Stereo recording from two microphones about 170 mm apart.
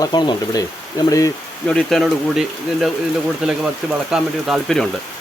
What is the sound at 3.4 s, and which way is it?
Speech, 5° right (ahead or behind).